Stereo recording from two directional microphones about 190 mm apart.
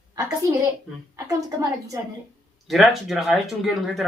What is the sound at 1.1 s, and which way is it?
Speech, 20° right (ahead or behind).